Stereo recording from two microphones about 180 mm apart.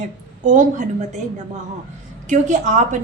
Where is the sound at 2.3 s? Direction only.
40° right (ahead or behind).